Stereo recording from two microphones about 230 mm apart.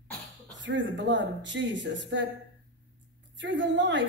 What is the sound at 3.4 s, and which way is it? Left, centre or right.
Speech, right.